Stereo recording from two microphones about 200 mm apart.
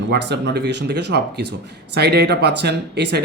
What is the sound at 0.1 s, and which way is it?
Speech, 55° right (ahead or behind).